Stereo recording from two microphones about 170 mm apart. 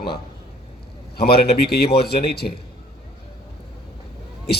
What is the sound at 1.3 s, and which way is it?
A man's voice, 70° left (ahead or behind).